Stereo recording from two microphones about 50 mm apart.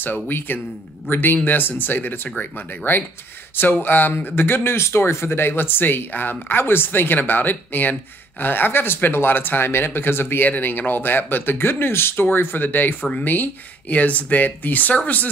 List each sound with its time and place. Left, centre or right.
0.0 s speech: left
3.8 s speech: left